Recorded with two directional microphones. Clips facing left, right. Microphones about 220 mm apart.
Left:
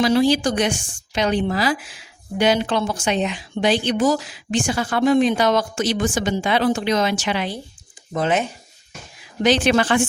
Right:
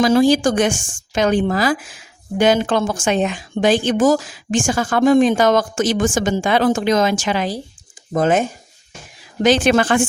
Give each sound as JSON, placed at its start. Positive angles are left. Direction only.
{"t": 0.0, "sound": "speech", "side_deg": -45}